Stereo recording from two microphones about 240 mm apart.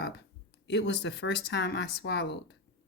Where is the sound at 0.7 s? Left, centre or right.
Left.